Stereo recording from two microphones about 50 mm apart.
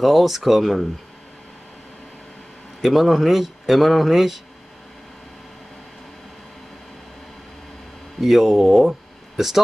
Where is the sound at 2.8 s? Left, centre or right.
Centre.